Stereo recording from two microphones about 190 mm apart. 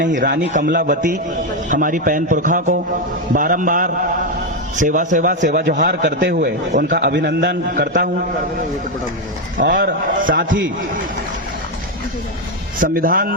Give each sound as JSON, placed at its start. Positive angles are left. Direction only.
{"t": 0.1, "sound": "a man's voice", "side_deg": -45}
{"t": 6.3, "sound": "a man's voice", "side_deg": -40}
{"t": 6.9, "sound": "a man's voice", "side_deg": -65}
{"t": 7.7, "sound": "a man's voice", "side_deg": -40}
{"t": 9.7, "sound": "a man's voice", "side_deg": -45}
{"t": 12.8, "sound": "a man's voice", "side_deg": -50}